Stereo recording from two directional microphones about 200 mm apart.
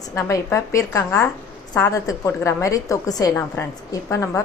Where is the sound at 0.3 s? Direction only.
15° left (ahead or behind).